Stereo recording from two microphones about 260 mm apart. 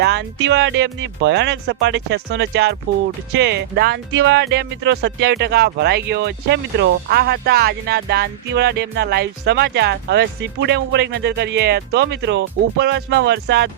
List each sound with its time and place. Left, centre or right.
0.0 s speech: right